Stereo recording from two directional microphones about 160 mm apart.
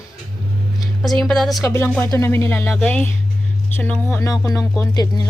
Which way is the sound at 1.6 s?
15° left (ahead or behind).